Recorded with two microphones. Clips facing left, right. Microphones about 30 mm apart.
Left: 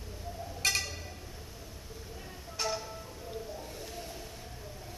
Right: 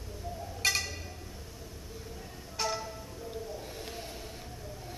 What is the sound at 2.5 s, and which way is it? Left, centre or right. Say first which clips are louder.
Music: right 1 dB; centre.